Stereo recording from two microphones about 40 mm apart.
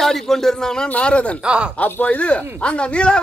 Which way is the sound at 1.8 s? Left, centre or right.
Left.